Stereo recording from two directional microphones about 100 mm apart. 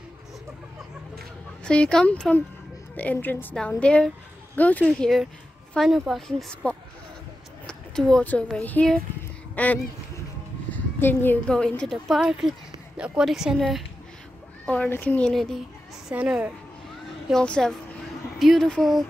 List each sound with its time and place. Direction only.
1.6 s speech: 10° left (ahead or behind)
3.0 s a woman's voice: 15° left (ahead or behind)
7.6 s a sound: 5° left (ahead or behind)
8.8 s speech: 10° left (ahead or behind)
10.7 s a sound: 20° left (ahead or behind)
11.4 s speech: 5° left (ahead or behind)
14.7 s speech: 15° left (ahead or behind)
16.1 s a woman's voice: 10° right (ahead or behind)
17.3 s speech: 10° left (ahead or behind)